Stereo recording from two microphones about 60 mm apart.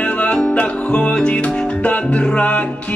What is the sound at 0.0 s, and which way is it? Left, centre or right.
Music, left.